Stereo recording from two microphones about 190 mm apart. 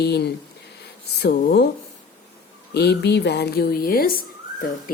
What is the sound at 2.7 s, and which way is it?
A woman's voice, 60° left (ahead or behind).